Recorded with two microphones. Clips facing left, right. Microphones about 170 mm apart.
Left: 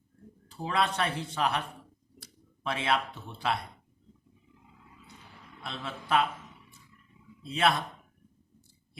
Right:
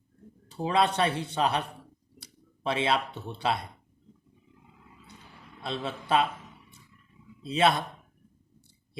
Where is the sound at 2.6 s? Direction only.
25° right (ahead or behind).